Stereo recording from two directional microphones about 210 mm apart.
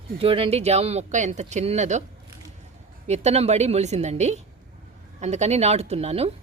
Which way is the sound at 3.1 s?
30° right (ahead or behind).